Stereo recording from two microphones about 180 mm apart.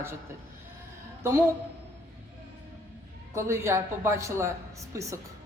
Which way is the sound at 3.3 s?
15° right (ahead or behind).